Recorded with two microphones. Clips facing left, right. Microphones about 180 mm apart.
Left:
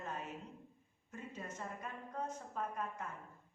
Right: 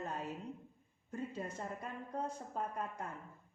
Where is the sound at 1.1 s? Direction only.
35° right (ahead or behind).